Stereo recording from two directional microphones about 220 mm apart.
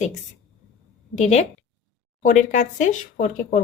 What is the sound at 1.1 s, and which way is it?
Speech, 30° left (ahead or behind).